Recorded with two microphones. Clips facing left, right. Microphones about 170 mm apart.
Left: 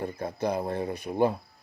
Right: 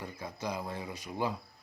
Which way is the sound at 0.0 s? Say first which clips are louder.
Left 9 dB; 55° left (ahead or behind).